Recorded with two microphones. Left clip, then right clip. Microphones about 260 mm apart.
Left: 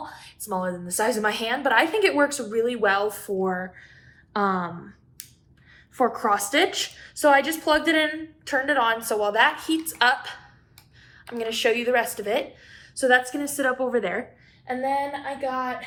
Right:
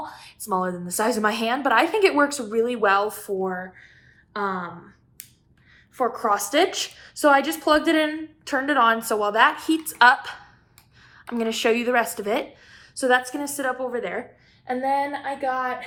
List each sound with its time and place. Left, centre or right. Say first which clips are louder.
0.0 s a woman's voice: right 2 dB; right
3.4 s a woman's voice: left 1 dB; centre
6.0 s a woman's voice: left 1 dB; centre
6.6 s a woman's voice: right 1 dB; centre
11.3 s a woman's voice: right 1 dB; right; by 14.3 s centre
14.6 s a woman's voice: right 2 dB; right